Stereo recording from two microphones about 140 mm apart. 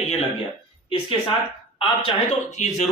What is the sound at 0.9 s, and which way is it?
Speech, 35° left (ahead or behind).